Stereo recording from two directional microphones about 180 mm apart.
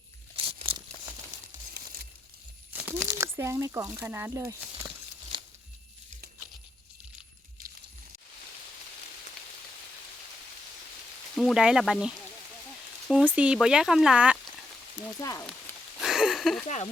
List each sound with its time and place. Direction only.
0.3 s crumpling: 30° right (ahead or behind)
2.7 s crumpling: 10° right (ahead or behind)
3.1 s speech: 15° right (ahead or behind)
5.3 s a sound: 25° right (ahead or behind)
11.3 s speech: centre (ahead or behind)
15.2 s sizzle: 20° left (ahead or behind)
16.0 s a sound: centre (ahead or behind)